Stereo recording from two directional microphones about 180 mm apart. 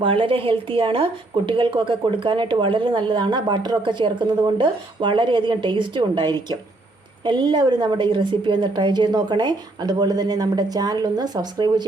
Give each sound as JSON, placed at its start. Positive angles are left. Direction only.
{"t": 0.0, "sound": "a woman's voice", "side_deg": -30}